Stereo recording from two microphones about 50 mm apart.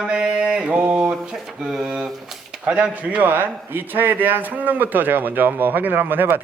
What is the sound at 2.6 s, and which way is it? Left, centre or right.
Speech, right.